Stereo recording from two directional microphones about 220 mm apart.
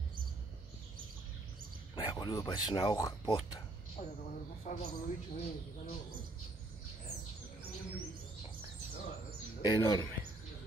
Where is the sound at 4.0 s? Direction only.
35° left (ahead or behind).